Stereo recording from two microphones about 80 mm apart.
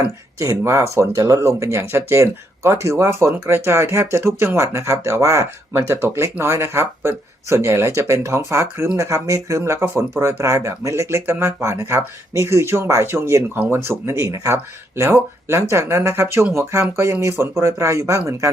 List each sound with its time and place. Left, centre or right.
0.6 s speech: right
9.0 s speech: right